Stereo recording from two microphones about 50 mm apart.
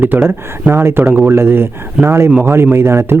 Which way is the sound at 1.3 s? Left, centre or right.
Right.